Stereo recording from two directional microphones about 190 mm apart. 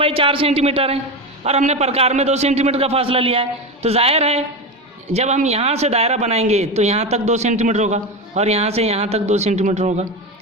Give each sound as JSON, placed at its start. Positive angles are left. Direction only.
{"t": 0.0, "sound": "a man's voice", "side_deg": -30}